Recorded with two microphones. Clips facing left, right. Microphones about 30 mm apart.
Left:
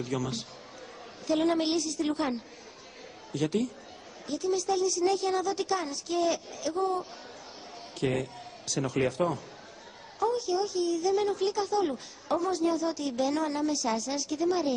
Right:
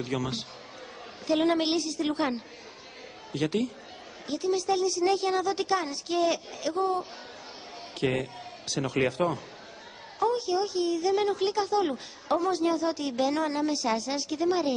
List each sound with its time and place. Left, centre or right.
0.0 s a woman's voice: right
3.3 s a woman's voice: right